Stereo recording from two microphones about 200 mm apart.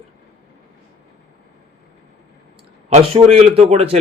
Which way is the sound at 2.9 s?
30° right (ahead or behind).